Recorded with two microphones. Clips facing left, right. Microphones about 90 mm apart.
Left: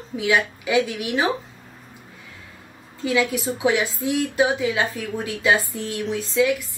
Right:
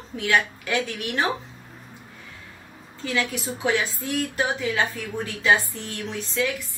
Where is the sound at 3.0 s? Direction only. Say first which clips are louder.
Left 5 dB; 10° left (ahead or behind).